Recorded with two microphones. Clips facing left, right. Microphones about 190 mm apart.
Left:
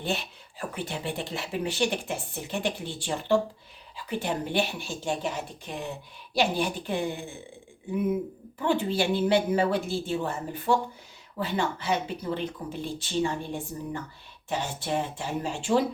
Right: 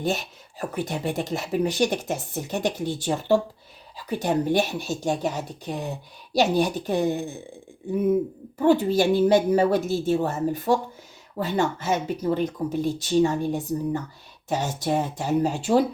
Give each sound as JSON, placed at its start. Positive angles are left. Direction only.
{"t": 0.0, "sound": "speech", "side_deg": -45}
{"t": 8.5, "sound": "speech", "side_deg": -40}